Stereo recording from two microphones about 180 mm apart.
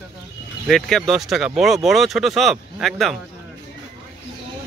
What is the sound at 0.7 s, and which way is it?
Speech, centre (ahead or behind).